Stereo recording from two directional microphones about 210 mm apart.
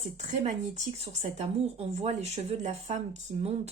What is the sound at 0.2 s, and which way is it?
Speech, 30° right (ahead or behind).